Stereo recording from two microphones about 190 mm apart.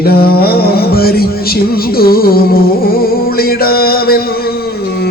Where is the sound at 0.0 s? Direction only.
55° left (ahead or behind).